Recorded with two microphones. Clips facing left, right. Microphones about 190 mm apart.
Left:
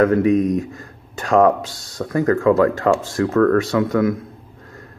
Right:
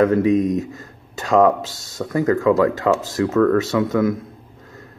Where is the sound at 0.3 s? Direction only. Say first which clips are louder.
Left 1 dB; centre (ahead or behind).